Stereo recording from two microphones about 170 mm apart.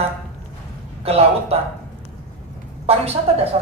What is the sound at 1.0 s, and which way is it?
Speech, 35° right (ahead or behind).